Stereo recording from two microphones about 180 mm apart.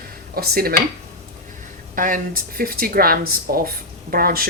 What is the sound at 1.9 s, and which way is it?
Speech, 45° right (ahead or behind).